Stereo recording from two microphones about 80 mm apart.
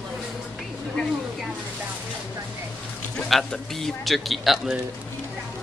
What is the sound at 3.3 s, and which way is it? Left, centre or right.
A man's voice, centre.